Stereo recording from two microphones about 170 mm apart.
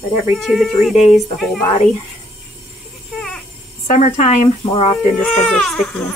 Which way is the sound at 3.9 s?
45° left (ahead or behind).